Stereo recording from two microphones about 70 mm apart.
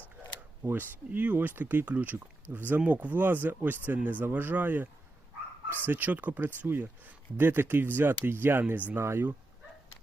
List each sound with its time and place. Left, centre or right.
0.6 s speech: right